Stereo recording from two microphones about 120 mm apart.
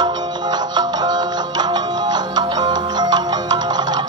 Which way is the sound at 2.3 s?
35° right (ahead or behind).